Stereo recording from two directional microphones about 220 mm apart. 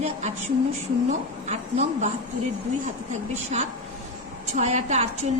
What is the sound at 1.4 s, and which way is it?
Speech, 30° right (ahead or behind).